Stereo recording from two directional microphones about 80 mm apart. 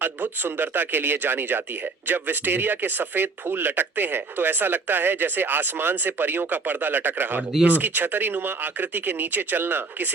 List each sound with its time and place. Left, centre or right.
0.0 s speech: right